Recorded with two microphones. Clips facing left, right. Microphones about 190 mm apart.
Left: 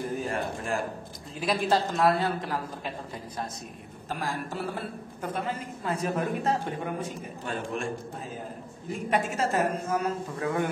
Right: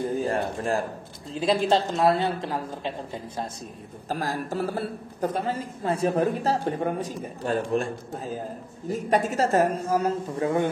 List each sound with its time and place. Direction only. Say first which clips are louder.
0.0 s a man's voice: right 5 dB; 30° right (ahead or behind)
4.1 s a man's voice: right 4 dB; 40° right (ahead or behind)